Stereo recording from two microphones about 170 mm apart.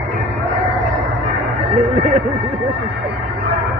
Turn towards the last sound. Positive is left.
turn(degrees=-35)  # may be behind; listen again after turning